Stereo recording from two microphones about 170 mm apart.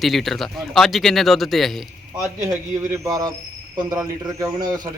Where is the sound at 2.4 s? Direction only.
20° right (ahead or behind).